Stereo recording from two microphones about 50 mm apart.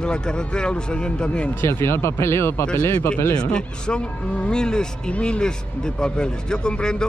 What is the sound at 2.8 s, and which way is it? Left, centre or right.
Speech, left.